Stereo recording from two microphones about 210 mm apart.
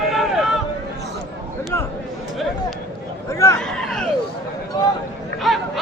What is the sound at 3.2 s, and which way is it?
Chatter, 15° left (ahead or behind).